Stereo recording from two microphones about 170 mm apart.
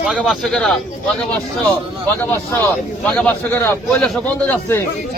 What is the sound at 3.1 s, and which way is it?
Speech, 10° left (ahead or behind).